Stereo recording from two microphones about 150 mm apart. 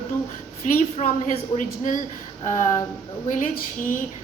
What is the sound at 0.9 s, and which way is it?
A woman's voice, 55° left (ahead or behind).